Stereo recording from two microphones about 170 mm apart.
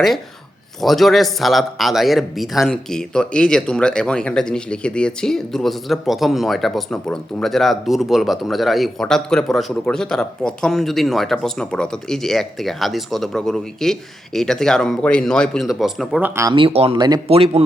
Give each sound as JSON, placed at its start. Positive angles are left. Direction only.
{"t": 0.8, "sound": "speech", "side_deg": 0}
{"t": 16.3, "sound": "speech", "side_deg": -15}
{"t": 16.6, "sound": "speech", "side_deg": -35}
{"t": 17.2, "sound": "speech", "side_deg": -35}